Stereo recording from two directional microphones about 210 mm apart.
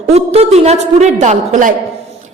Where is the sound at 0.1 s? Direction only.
30° right (ahead or behind).